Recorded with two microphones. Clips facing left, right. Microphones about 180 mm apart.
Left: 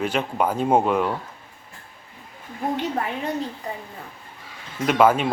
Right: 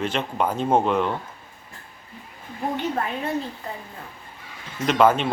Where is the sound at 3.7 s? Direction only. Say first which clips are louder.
Left 2 dB; 15° left (ahead or behind).